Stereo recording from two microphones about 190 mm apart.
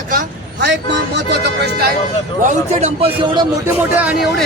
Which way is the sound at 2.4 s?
40° right (ahead or behind).